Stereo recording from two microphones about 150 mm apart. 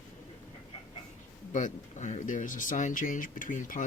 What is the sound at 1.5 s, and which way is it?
Speech, 55° left (ahead or behind).